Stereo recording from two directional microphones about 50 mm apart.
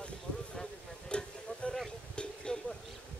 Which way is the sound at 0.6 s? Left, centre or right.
Centre.